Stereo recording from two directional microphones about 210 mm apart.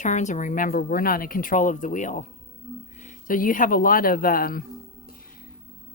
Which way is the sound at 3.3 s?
40° left (ahead or behind).